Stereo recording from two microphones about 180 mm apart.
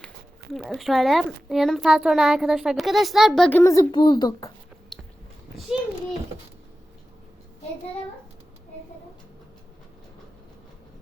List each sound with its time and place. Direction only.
0.5 s a child's voice: centre (ahead or behind)
3.6 s a woman's voice: 20° left (ahead or behind)
4.9 s a sound: centre (ahead or behind)
5.7 s a child's voice: 5° right (ahead or behind)